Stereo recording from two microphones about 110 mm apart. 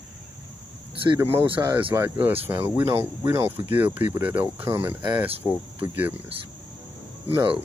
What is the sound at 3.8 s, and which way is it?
Cricket, 15° right (ahead or behind).